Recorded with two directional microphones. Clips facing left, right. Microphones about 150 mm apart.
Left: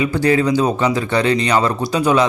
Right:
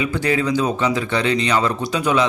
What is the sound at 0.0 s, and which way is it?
A man's voice, 40° left (ahead or behind).